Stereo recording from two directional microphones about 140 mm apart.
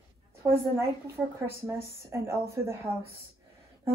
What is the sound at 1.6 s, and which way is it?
Speech, 20° right (ahead or behind).